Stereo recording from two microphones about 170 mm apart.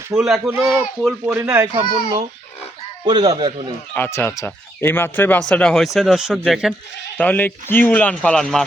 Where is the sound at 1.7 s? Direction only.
30° right (ahead or behind).